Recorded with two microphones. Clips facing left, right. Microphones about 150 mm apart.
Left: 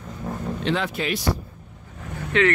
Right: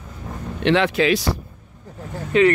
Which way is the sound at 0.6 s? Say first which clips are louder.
Right 9 dB; 80° right.